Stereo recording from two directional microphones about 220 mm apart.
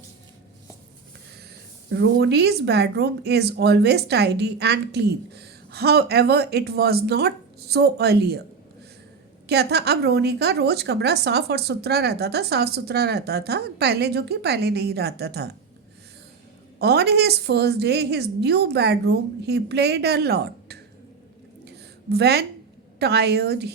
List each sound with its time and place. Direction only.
1.9 s a woman's voice: 50° right (ahead or behind)
9.5 s a woman's voice: 50° right (ahead or behind)
16.7 s a woman's voice: 45° right (ahead or behind)
22.1 s a woman's voice: 45° right (ahead or behind)